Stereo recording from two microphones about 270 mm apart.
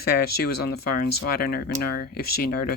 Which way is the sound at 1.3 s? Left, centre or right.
Left.